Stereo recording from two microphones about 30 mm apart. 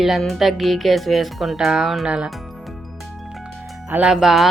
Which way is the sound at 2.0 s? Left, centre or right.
Right.